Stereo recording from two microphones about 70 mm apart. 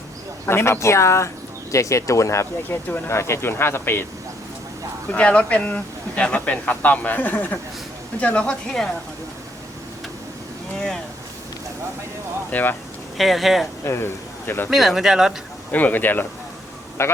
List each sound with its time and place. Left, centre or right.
0.4 s speech: left
2.6 s speech: left
5.1 s speech: centre
10.8 s speech: centre
12.5 s speech: left
13.1 s speech: centre
13.8 s speech: left
14.7 s speech: centre
15.7 s speech: left
17.0 s speech: left